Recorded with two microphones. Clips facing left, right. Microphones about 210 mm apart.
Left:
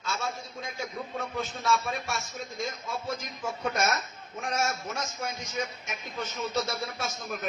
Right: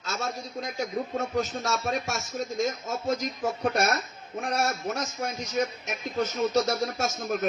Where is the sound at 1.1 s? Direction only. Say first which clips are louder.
Right 5 dB; 45° right (ahead or behind).